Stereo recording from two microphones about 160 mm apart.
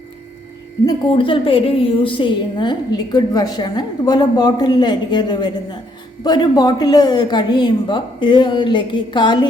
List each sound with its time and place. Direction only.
0.9 s a woman's voice: 35° left (ahead or behind)